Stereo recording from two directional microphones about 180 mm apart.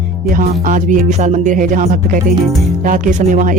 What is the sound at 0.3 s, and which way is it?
Speech, 50° right (ahead or behind).